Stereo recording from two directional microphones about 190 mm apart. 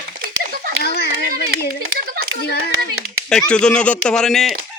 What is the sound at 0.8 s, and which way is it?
Children playing, 55° left (ahead or behind).